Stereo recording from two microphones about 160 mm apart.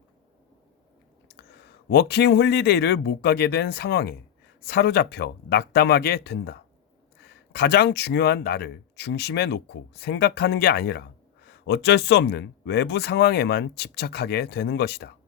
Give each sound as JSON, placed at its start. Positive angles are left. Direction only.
{"t": 1.9, "sound": "speech", "side_deg": 90}